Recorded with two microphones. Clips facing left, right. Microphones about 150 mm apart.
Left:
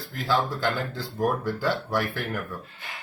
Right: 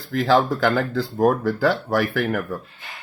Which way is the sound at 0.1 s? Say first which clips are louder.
Right 8 dB; 90° right.